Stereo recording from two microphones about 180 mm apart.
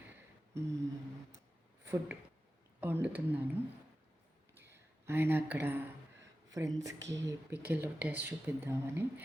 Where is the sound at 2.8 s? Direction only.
10° right (ahead or behind).